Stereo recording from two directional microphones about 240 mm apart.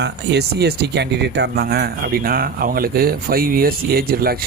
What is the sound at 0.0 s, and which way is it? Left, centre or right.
Speech, right.